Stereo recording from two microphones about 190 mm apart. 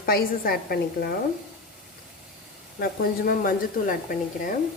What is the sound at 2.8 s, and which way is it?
A woman's voice, 50° left (ahead or behind).